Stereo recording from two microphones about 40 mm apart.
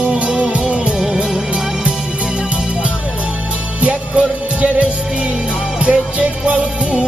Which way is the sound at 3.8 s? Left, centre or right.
Right.